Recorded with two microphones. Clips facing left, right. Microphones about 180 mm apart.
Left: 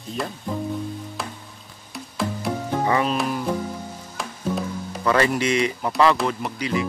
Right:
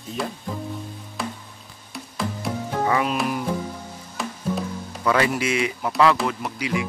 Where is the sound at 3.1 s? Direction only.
10° right (ahead or behind).